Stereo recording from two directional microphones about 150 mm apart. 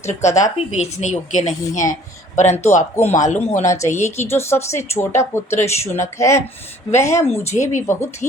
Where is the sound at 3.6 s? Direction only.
20° left (ahead or behind).